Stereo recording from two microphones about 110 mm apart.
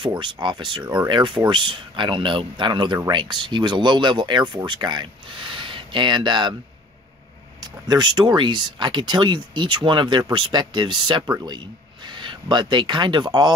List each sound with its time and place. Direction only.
0.0 s speech: 45° right (ahead or behind)
7.6 s speech: 40° right (ahead or behind)